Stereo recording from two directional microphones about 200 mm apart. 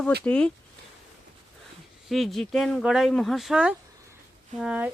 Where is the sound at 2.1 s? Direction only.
Centre (ahead or behind).